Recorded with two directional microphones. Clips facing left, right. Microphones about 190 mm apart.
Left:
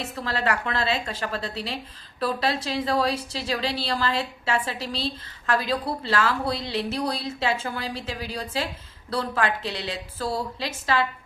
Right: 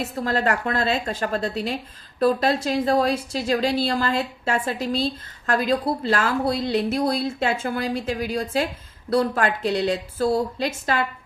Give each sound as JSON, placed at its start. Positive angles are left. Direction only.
{"t": 0.2, "sound": "speech", "side_deg": -45}